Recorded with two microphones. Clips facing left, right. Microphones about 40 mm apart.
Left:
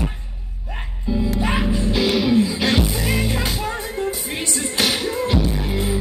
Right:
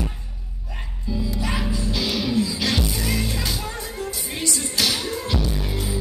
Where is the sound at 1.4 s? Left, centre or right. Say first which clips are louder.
Left 5 dB; left.